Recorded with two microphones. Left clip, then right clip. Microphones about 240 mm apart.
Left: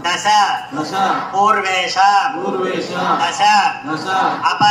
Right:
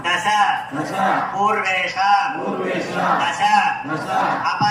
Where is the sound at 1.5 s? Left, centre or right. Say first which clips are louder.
Left 3 dB; centre.